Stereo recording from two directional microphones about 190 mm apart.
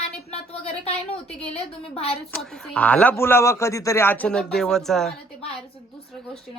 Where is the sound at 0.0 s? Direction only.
35° left (ahead or behind).